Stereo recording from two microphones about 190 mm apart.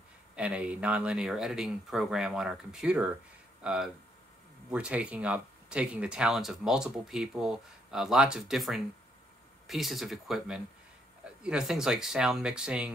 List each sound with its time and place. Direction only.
0.4 s speech: 5° right (ahead or behind)